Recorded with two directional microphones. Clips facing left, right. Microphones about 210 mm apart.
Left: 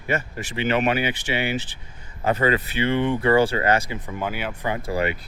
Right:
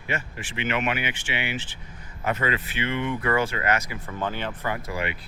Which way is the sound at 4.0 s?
10° left (ahead or behind).